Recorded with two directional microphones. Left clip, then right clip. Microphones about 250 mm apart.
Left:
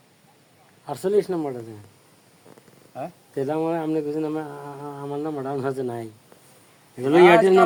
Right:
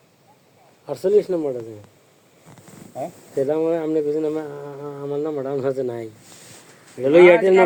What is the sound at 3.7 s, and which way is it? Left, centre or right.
Speech, left.